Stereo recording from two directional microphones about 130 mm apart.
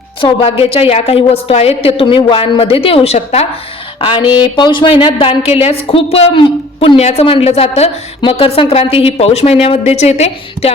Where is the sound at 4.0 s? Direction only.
40° left (ahead or behind).